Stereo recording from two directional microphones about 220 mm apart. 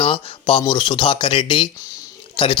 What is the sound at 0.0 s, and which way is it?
Speech, 25° left (ahead or behind).